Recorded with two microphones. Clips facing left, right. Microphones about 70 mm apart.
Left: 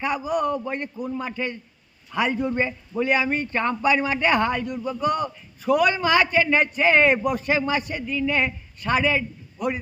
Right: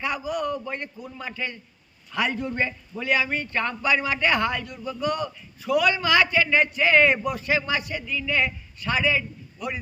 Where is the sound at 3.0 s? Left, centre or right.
Left.